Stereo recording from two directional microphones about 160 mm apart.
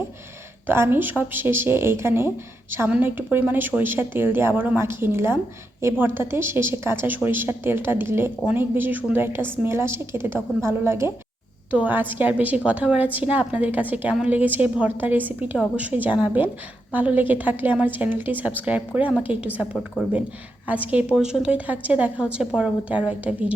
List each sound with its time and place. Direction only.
0.7 s speech: 15° right (ahead or behind)